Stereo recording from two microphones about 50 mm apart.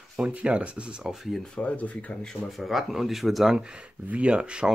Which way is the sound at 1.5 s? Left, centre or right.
Left.